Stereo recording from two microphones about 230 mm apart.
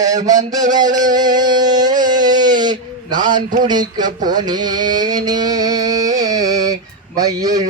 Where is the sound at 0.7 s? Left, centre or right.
Centre.